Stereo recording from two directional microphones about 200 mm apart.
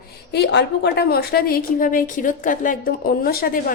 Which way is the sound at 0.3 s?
55° left (ahead or behind).